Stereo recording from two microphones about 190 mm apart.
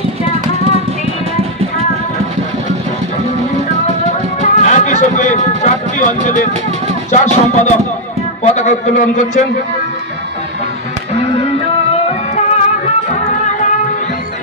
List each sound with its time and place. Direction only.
4.4 s music: 40° left (ahead or behind)
8.5 s a man's voice: 35° left (ahead or behind)
12.1 s music: 35° left (ahead or behind)